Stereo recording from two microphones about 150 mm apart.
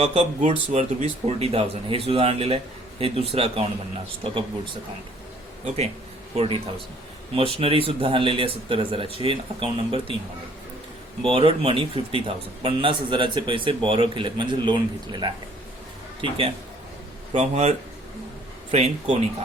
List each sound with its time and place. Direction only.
0.0 s speech: 45° right (ahead or behind)
5.6 s speech: 45° right (ahead or behind)
11.2 s speech: 40° right (ahead or behind)
17.3 s speech: 45° right (ahead or behind)